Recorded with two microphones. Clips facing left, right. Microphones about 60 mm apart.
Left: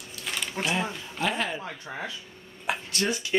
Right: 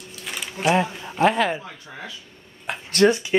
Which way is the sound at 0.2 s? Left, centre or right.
Centre.